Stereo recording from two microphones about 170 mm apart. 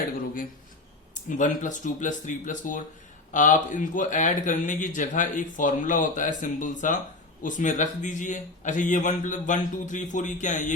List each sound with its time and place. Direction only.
1.4 s speech: 50° left (ahead or behind)